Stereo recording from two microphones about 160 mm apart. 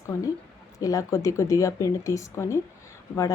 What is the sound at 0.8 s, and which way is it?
Speech, 20° left (ahead or behind).